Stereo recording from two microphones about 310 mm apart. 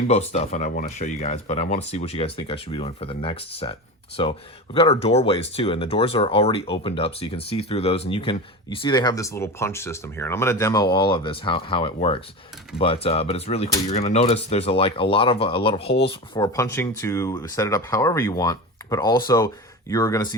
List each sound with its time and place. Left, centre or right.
0.1 s speech: left